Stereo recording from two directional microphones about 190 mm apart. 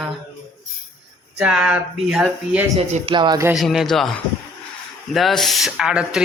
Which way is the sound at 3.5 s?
Centre (ahead or behind).